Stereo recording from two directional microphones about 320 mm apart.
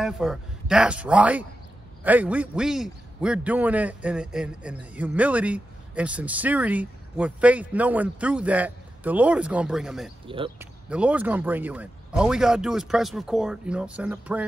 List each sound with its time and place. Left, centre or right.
0.0 s a man's voice: centre
10.2 s speech: centre
10.9 s a man's voice: centre